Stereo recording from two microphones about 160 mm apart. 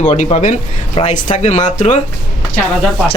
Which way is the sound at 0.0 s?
45° left (ahead or behind).